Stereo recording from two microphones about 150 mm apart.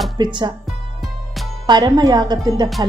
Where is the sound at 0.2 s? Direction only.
30° right (ahead or behind).